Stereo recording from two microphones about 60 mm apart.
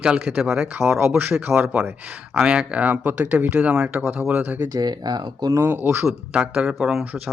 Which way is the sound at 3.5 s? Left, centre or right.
Centre.